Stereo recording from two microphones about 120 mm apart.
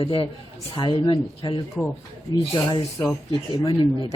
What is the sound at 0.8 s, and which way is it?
Speech, 35° left (ahead or behind).